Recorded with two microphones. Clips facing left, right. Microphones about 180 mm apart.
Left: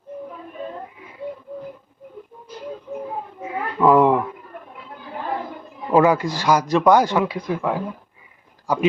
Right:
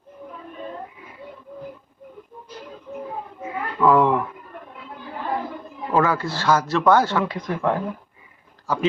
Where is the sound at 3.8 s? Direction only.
15° left (ahead or behind).